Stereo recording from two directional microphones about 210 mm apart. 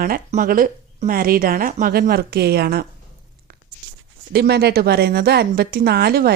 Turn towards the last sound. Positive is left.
turn(degrees=-50)  # may be behind; listen again after turning